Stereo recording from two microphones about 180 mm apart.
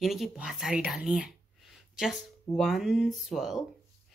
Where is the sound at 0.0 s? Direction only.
Centre (ahead or behind).